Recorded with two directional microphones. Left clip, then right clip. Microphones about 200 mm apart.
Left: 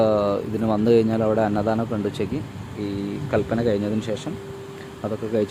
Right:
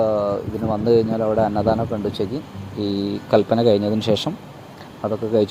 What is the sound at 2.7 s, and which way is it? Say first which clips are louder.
Speech: right 5 dB; 15° right (ahead or behind).